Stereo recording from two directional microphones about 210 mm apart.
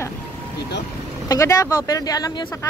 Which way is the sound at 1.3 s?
15° left (ahead or behind).